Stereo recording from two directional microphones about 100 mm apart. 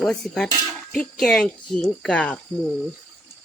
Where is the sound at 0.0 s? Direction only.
5° left (ahead or behind).